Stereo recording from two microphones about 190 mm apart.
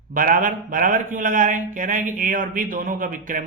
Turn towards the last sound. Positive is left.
turn(degrees=-45)  # may be behind; listen again after turning